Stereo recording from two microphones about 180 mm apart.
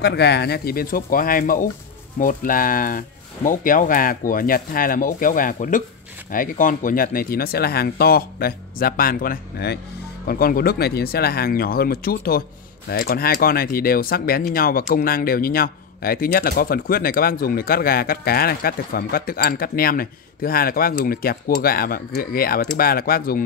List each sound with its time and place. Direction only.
0.0 s speech: 65° left (ahead or behind)